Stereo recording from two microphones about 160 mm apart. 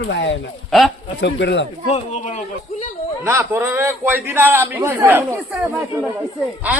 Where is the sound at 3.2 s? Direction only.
15° right (ahead or behind).